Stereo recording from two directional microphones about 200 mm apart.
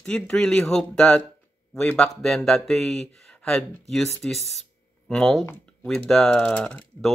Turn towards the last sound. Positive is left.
turn(degrees=5)  # may be behind; listen again after turning